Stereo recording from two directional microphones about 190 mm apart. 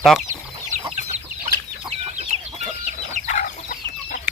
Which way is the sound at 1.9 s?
35° right (ahead or behind).